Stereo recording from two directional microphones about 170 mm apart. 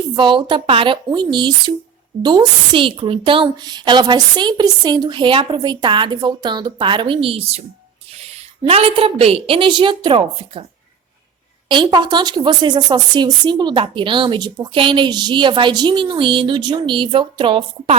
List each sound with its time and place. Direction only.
0.2 s a woman's voice: 30° right (ahead or behind)
11.7 s speech: 30° right (ahead or behind)